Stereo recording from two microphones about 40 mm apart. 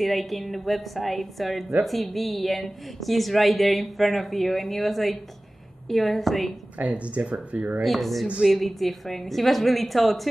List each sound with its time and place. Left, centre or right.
0.0 s a woman's voice: centre
6.8 s speech: right
7.5 s speech: right
7.8 s a woman's voice: centre